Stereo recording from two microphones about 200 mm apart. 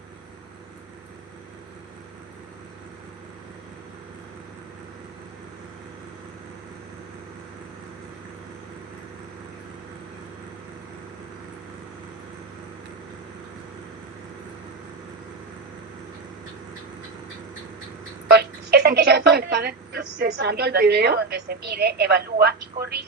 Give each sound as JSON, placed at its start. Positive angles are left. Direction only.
{"t": 18.3, "sound": "speech", "side_deg": -55}